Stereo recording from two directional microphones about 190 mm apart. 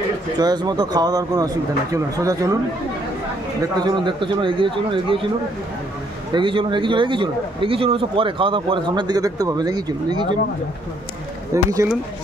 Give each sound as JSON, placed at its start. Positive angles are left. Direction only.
{"t": 0.4, "sound": "a man's voice", "side_deg": -20}
{"t": 3.8, "sound": "a man's voice", "side_deg": -25}
{"t": 6.3, "sound": "a man's voice", "side_deg": -25}
{"t": 11.5, "sound": "speech", "side_deg": -15}